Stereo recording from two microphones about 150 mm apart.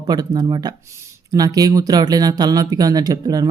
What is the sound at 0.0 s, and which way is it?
Speech, 25° right (ahead or behind).